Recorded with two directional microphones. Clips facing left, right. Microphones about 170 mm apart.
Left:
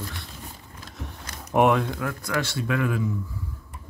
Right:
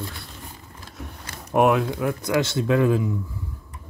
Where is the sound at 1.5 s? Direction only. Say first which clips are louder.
Right 1 dB; centre (ahead or behind).